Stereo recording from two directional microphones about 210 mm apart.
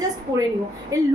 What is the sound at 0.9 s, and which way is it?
Speech, 15° right (ahead or behind).